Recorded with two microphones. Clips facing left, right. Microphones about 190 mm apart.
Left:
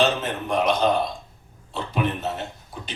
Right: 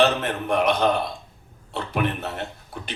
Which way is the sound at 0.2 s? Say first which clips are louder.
Right 1 dB; 60° right (ahead or behind).